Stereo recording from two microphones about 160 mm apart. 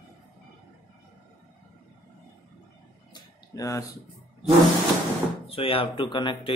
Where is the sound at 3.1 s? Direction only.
20° left (ahead or behind).